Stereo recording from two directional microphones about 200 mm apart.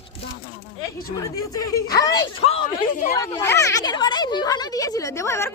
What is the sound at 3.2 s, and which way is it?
Speech, 15° left (ahead or behind).